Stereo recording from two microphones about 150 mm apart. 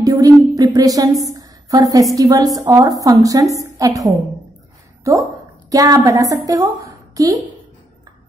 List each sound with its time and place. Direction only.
0.0 s music: 25° right (ahead or behind)
1.2 s a sound: 25° right (ahead or behind)
2.1 s a woman's voice: 25° right (ahead or behind)